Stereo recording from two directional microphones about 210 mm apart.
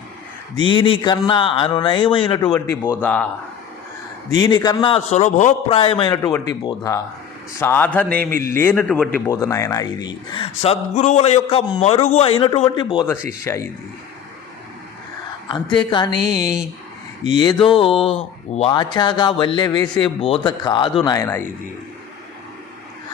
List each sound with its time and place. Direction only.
0.7 s a man's voice: 25° left (ahead or behind)
2.5 s a man's voice: 10° left (ahead or behind)
4.4 s a man's voice: 20° left (ahead or behind)
15.4 s a woman's voice: 20° left (ahead or behind)